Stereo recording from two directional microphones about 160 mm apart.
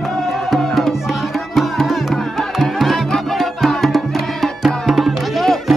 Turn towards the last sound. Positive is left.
turn(degrees=0)  # may be behind; listen again after turning